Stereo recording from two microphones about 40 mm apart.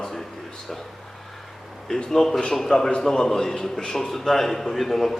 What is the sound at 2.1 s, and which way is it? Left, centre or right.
A man's voice, centre.